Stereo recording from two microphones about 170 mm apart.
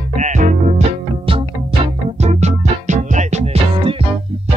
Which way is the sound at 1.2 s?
30° right (ahead or behind).